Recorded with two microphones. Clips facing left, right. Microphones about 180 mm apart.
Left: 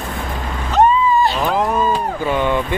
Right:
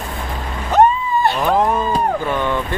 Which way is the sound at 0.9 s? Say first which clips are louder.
Left 3 dB; 60° right (ahead or behind).